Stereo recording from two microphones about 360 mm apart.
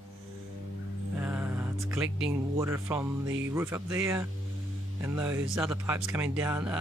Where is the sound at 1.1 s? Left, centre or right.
Centre.